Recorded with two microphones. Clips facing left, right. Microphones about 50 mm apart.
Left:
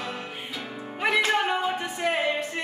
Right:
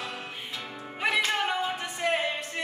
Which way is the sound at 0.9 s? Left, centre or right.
Centre.